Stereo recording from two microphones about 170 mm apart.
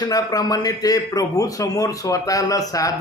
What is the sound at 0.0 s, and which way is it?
A man's voice, 20° left (ahead or behind).